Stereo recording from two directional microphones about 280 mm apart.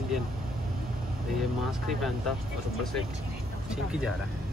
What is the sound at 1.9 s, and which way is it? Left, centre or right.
Speech, centre.